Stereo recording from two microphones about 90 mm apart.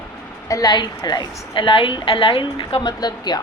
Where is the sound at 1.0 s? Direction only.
60° left (ahead or behind).